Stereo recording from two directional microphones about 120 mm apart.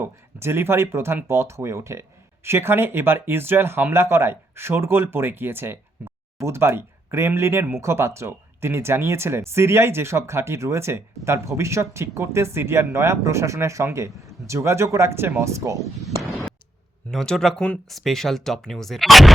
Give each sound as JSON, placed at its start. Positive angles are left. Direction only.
{"t": 0.0, "sound": "speech", "side_deg": -20}
{"t": 16.0, "sound": "a sound", "side_deg": 0}
{"t": 17.1, "sound": "speech", "side_deg": 5}